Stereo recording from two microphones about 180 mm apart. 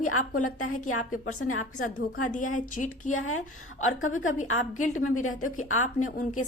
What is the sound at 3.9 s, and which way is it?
Speech, 90° left.